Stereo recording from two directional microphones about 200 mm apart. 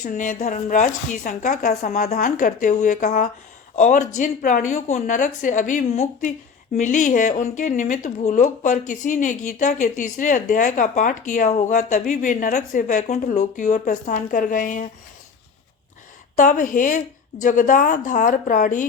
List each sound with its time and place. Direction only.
0.0 s a woman's voice: 40° left (ahead or behind)
16.4 s a woman's voice: 40° left (ahead or behind)